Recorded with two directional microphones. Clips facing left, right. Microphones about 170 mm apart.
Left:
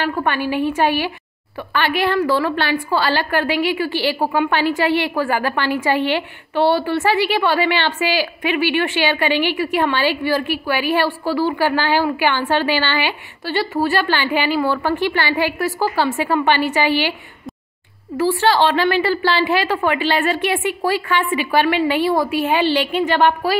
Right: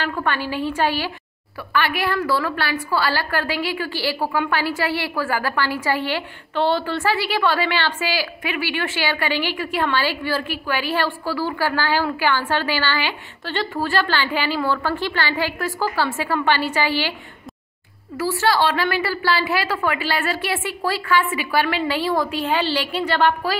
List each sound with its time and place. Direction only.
0.0 s a woman's voice: 15° left (ahead or behind)
18.1 s a woman's voice: 25° left (ahead or behind)